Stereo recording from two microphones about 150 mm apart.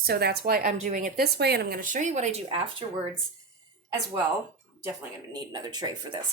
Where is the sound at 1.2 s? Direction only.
90° right; by 2.4 s 50° right (ahead or behind).